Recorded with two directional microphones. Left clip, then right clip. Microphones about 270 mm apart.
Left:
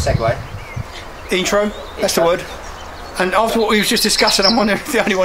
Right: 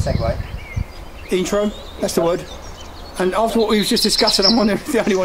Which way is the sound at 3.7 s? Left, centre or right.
Centre.